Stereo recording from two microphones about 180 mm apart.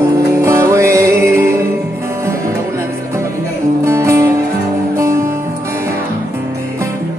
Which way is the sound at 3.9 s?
15° right (ahead or behind).